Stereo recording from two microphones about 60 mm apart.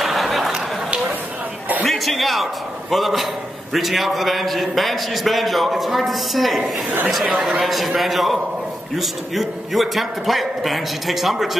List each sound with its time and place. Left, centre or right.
0.0 s a sound: centre
1.8 s a man's voice: centre
6.6 s speech: right
7.6 s a man's voice: centre